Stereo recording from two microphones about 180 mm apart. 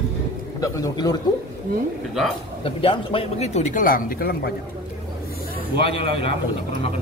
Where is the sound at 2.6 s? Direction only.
30° left (ahead or behind); by 4.5 s 55° left (ahead or behind).